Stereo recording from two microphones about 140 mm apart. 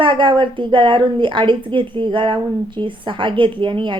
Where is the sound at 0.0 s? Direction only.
35° right (ahead or behind).